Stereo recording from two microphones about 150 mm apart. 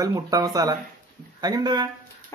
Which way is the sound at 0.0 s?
25° right (ahead or behind).